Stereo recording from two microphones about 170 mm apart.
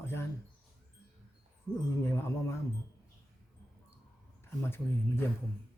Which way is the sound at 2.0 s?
15° left (ahead or behind).